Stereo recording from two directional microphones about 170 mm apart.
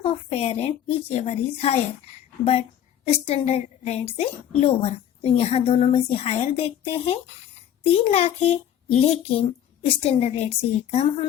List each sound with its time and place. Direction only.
0.0 s a woman's voice: 35° left (ahead or behind)